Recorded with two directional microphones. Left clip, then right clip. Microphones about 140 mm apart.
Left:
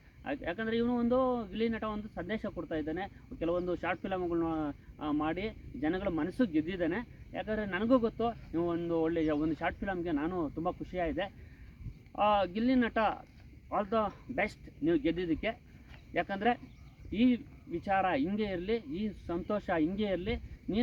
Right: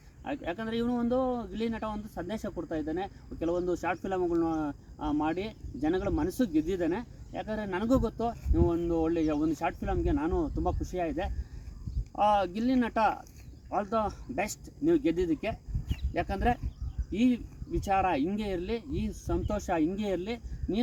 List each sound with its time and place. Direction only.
0.3 s speech: 10° right (ahead or behind)